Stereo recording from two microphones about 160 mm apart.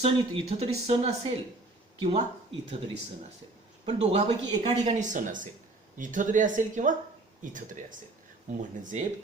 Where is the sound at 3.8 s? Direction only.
40° right (ahead or behind).